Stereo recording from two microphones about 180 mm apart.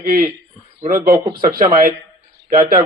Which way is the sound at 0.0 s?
55° right (ahead or behind).